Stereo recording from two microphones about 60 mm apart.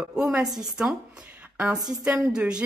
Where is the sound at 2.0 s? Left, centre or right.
Centre.